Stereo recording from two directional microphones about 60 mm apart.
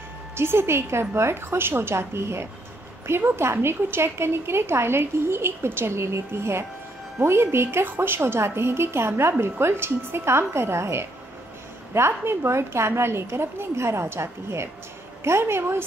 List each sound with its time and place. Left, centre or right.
0.4 s a woman's voice: right